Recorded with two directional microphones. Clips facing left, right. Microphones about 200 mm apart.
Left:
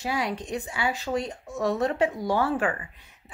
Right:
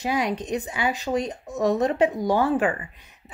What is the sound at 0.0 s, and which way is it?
A woman's voice, 20° right (ahead or behind).